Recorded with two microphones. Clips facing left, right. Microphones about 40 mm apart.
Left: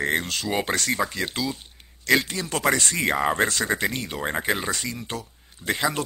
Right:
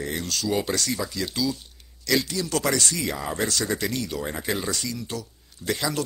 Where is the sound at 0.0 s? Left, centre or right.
Left.